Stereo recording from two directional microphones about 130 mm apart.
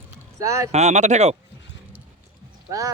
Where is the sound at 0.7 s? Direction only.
60° right (ahead or behind).